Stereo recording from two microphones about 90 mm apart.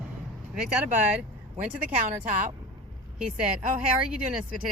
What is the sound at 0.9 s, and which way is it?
Speech, 10° right (ahead or behind).